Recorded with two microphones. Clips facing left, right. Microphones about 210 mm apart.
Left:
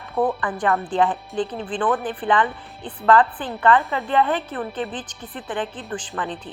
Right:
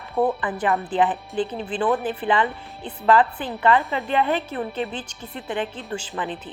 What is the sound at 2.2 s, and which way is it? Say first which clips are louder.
Speech: left 2 dB; 20° right (ahead or behind).